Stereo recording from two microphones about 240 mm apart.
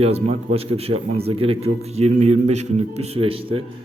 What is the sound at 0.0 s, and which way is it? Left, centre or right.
A man's voice, right.